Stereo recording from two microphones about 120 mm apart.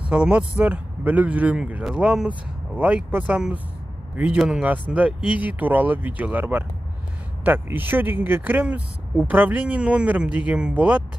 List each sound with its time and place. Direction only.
0.1 s speech: 10° right (ahead or behind)